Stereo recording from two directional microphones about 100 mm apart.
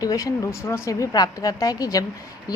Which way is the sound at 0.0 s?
35° left (ahead or behind).